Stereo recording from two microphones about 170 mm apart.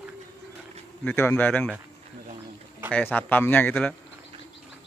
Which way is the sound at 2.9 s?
10° left (ahead or behind).